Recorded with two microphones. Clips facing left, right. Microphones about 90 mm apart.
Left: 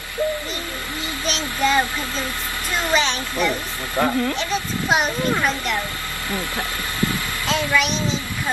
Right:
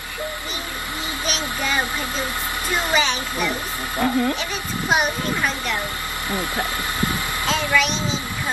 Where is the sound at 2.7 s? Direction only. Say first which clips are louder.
Left 1 dB; 15° right (ahead or behind).